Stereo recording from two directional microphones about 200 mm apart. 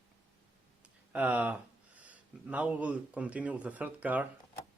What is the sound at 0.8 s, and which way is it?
Speech, 5° right (ahead or behind).